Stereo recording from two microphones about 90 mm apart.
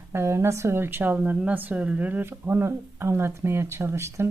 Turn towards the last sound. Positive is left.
turn(degrees=-30)  # may be behind; listen again after turning